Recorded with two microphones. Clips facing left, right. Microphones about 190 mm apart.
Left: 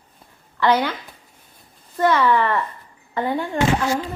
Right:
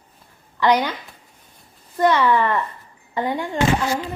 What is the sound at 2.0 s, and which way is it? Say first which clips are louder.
A woman's voice: even; 15° right (ahead or behind).